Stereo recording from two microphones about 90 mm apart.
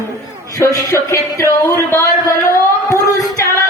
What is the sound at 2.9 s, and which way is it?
Music, 35° left (ahead or behind).